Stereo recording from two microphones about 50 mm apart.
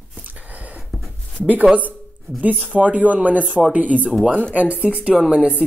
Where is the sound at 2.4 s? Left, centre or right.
Right.